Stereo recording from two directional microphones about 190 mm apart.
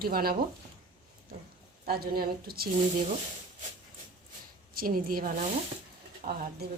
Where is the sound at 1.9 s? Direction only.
55° right (ahead or behind).